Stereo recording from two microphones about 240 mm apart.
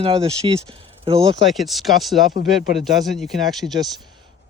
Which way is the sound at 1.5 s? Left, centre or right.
Centre.